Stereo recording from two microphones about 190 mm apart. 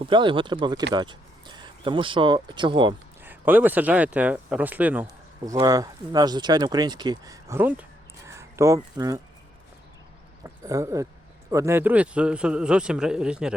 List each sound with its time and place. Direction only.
0.0 s speech: 25° right (ahead or behind)
3.2 s speech: 10° right (ahead or behind)
10.4 s a man's voice: 15° right (ahead or behind)